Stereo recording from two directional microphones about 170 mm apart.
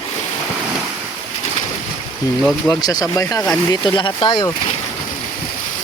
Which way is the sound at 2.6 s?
20° left (ahead or behind).